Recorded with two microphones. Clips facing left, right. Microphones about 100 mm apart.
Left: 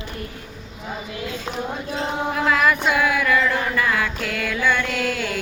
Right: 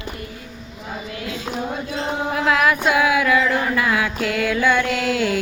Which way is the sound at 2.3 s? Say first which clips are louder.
Right 1 dB; 5° right (ahead or behind).